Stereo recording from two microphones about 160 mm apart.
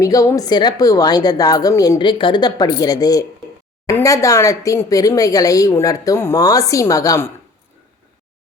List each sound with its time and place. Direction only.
0.0 s speech: 20° left (ahead or behind)